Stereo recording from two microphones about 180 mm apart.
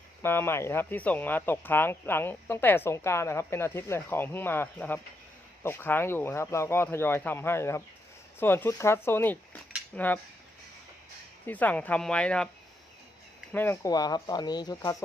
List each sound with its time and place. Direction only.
0.2 s speech: 10° left (ahead or behind)
11.4 s speech: 10° left (ahead or behind)
13.5 s speech: 10° left (ahead or behind)